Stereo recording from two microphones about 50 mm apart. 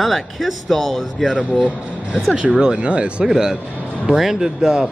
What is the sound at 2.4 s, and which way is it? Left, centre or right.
Speech, right.